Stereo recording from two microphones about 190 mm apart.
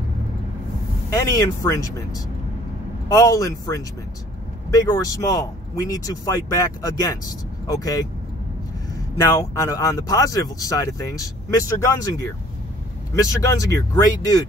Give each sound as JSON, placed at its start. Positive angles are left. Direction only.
{"t": 1.2, "sound": "speech", "side_deg": 15}
{"t": 3.1, "sound": "speech", "side_deg": 15}
{"t": 9.2, "sound": "speech", "side_deg": 15}